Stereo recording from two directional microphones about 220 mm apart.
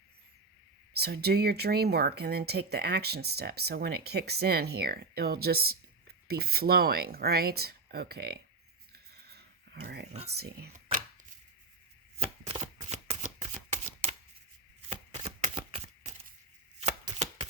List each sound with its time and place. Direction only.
0.9 s speech: 45° right (ahead or behind)
8.9 s a sound: 45° right (ahead or behind)
9.8 s speech: 45° right (ahead or behind)
12.2 s shuffling cards: 25° right (ahead or behind)